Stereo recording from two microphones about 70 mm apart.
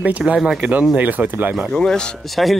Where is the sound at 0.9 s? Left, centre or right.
Right.